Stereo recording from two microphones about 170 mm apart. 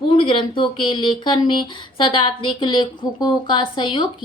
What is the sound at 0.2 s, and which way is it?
A woman's voice, 30° left (ahead or behind).